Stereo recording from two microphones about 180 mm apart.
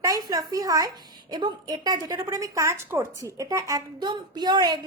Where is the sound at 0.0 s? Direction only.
20° right (ahead or behind).